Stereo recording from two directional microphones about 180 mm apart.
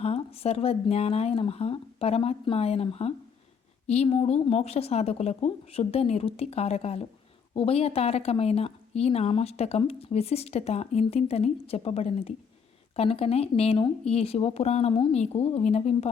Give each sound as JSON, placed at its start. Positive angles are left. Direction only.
{"t": 0.0, "sound": "a woman's voice", "side_deg": 30}